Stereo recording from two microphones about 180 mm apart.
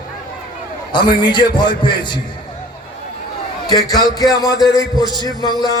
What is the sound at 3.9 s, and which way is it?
A man's voice, 20° left (ahead or behind).